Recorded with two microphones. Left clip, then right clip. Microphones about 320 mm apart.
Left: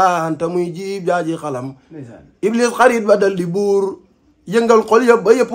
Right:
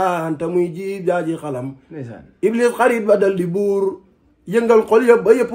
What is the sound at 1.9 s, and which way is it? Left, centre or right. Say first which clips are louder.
Speech: right 2 dB; right.